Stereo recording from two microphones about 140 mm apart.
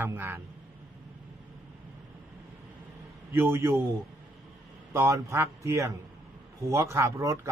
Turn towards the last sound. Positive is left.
turn(degrees=-20)  # may be behind; listen again after turning